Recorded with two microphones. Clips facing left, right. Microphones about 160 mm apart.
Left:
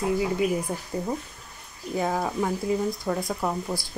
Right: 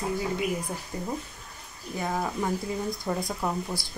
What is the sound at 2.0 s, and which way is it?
Speech, 5° left (ahead or behind).